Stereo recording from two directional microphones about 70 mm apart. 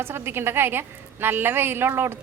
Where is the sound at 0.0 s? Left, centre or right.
Right.